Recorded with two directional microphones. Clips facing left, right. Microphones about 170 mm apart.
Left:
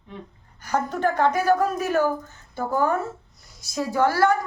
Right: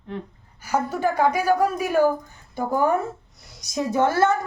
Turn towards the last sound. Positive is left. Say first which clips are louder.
# even
turn(degrees=-20)  # may be behind; listen again after turning